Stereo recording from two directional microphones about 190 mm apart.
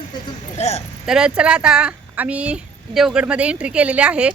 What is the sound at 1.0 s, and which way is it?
A woman's voice, 5° right (ahead or behind).